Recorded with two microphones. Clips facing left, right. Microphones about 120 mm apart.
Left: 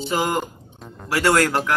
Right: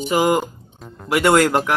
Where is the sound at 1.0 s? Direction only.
20° right (ahead or behind).